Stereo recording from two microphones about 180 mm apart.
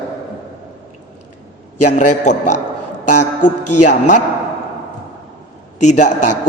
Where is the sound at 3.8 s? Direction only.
45° left (ahead or behind).